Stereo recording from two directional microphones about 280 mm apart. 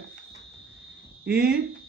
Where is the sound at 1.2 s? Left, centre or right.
Centre.